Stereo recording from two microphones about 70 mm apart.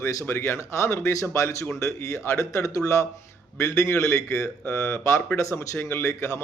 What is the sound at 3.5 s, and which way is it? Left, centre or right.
Speech, left.